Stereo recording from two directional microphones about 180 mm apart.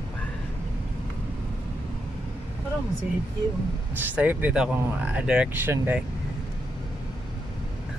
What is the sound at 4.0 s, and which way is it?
Speech, 10° right (ahead or behind).